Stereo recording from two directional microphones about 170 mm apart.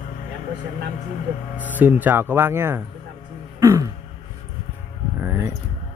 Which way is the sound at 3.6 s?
15° right (ahead or behind).